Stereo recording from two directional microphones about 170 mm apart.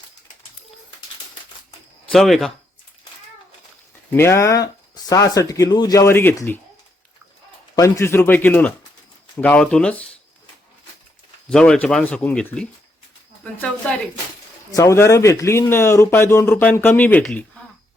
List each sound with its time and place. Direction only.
2.0 s speech: centre (ahead or behind)
4.1 s speech: 15° left (ahead or behind)
7.8 s speech: 15° left (ahead or behind)
11.4 s speech: 5° left (ahead or behind)
14.7 s speech: 20° left (ahead or behind)